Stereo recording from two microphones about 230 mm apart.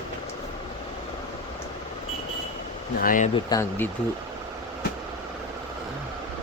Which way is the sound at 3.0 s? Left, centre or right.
Left.